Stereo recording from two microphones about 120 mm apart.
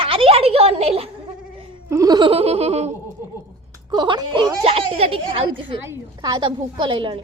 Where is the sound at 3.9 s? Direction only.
35° right (ahead or behind).